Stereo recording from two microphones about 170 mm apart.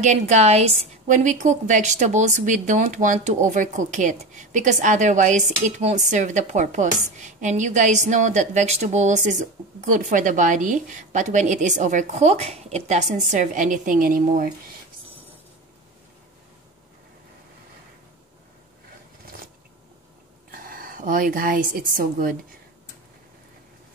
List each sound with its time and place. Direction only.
0.0 s a woman's voice: 45° right (ahead or behind)
20.5 s a woman's voice: 55° right (ahead or behind)